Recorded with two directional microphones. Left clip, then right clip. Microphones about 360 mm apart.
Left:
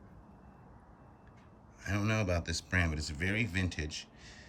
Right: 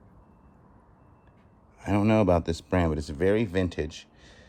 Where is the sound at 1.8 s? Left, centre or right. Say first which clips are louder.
Right 11 dB; centre.